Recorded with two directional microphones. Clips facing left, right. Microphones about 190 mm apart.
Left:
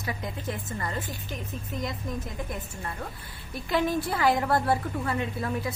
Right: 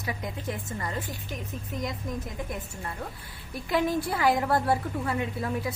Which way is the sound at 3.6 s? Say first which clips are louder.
Even; 15° right (ahead or behind).